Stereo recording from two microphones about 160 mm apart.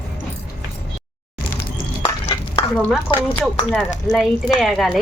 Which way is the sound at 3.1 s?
10° left (ahead or behind).